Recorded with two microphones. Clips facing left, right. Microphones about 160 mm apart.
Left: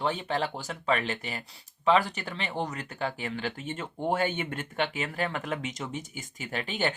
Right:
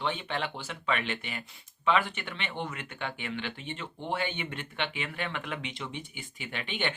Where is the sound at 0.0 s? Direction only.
40° left (ahead or behind).